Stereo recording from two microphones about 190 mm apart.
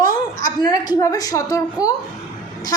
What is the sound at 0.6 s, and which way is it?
A woman's voice, 20° left (ahead or behind).